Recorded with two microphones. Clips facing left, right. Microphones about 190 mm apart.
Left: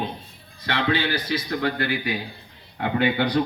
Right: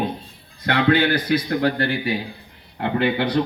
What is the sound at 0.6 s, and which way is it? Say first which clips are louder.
Speech: right 6 dB; 55° right (ahead or behind).